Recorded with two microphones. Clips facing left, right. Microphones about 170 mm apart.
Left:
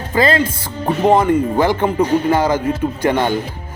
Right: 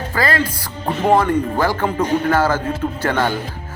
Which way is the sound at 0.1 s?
20° left (ahead or behind).